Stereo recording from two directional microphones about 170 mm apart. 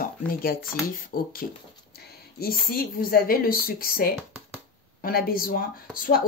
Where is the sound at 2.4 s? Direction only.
60° left (ahead or behind).